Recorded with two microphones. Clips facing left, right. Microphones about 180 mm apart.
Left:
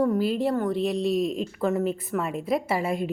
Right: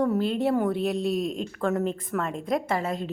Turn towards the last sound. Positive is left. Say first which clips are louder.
# left 2 dB
turn(degrees=10)  # may be behind; listen again after turning